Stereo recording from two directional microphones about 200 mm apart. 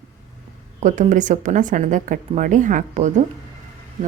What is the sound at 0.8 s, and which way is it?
Speech, 40° right (ahead or behind).